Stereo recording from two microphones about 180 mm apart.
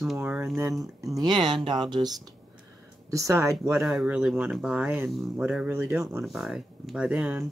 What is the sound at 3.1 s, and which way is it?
Speech, 15° right (ahead or behind).